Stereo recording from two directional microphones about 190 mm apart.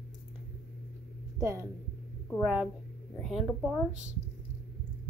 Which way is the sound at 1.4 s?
15° right (ahead or behind).